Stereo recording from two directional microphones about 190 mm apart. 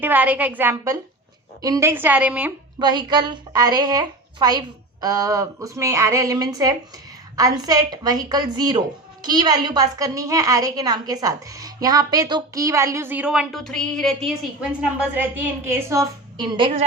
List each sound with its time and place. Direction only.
0.0 s a woman's voice: 10° right (ahead or behind)
2.7 s a woman's voice: 20° right (ahead or behind)